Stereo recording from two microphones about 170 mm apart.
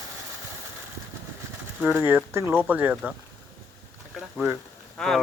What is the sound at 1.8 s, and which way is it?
Speech, 5° right (ahead or behind).